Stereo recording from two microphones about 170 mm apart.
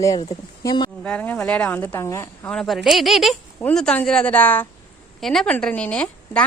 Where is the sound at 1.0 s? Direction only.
5° left (ahead or behind).